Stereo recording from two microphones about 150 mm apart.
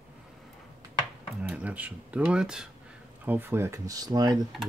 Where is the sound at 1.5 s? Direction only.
10° right (ahead or behind); by 4.4 s 25° right (ahead or behind).